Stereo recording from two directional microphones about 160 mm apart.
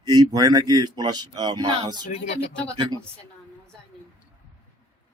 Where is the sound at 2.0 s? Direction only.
40° left (ahead or behind).